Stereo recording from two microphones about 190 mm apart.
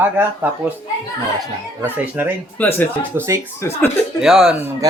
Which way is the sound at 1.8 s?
10° right (ahead or behind).